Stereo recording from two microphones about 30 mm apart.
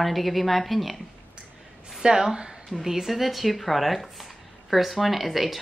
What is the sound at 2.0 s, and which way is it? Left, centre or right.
A woman's voice, centre.